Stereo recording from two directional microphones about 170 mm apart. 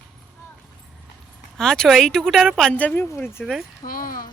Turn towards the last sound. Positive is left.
turn(degrees=55)  # may be behind; listen again after turning